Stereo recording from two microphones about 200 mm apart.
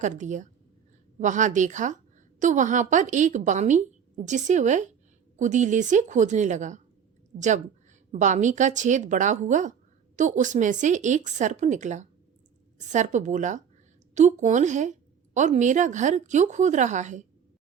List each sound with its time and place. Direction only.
0.0 s speech: 40° right (ahead or behind)